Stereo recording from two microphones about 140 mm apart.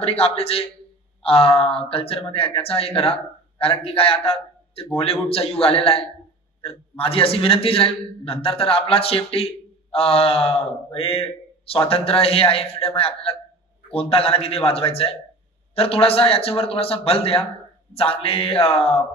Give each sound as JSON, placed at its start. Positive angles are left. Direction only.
{"t": 0.0, "sound": "a man's voice", "side_deg": 45}